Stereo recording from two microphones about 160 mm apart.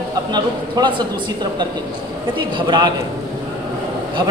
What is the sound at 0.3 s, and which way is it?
Speech, 30° right (ahead or behind).